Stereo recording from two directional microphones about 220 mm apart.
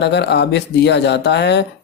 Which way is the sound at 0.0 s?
50° left (ahead or behind).